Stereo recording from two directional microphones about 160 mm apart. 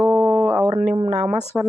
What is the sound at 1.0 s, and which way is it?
Speech, 35° right (ahead or behind).